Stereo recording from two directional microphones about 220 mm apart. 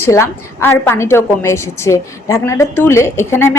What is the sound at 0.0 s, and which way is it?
A woman's voice, 10° left (ahead or behind).